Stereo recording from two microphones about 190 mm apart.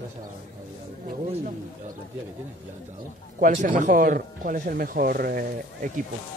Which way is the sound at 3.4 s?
45° right (ahead or behind).